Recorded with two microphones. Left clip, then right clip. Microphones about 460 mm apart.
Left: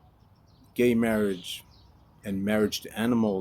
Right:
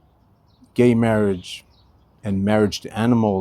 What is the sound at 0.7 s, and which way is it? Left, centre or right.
Speech, right.